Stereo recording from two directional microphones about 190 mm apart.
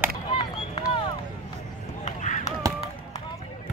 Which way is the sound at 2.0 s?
40° left (ahead or behind).